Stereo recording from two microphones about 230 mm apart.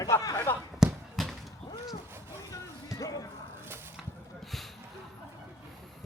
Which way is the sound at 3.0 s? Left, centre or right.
Centre.